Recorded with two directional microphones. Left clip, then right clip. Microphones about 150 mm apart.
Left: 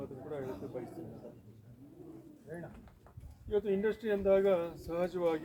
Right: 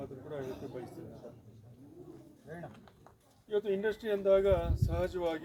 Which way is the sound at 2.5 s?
Centre (ahead or behind).